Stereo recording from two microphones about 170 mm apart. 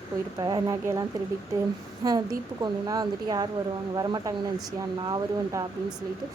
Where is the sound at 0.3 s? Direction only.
25° right (ahead or behind).